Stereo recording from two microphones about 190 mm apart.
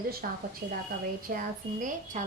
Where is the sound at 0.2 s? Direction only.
45° right (ahead or behind).